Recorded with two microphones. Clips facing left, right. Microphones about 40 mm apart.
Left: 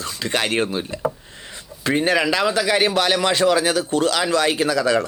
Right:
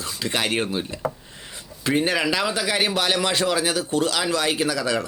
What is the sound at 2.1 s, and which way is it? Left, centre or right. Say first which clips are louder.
Speech: left 4 dB; centre.